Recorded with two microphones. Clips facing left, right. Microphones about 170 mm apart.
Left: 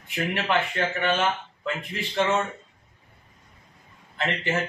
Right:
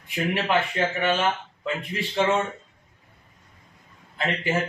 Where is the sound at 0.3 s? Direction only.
10° right (ahead or behind).